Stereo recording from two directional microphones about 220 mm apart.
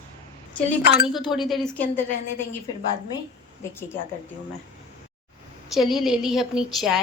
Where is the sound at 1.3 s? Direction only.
Centre (ahead or behind).